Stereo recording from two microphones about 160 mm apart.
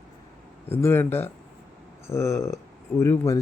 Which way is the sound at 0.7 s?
15° left (ahead or behind).